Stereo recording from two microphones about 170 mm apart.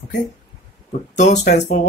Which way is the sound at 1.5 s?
45° left (ahead or behind).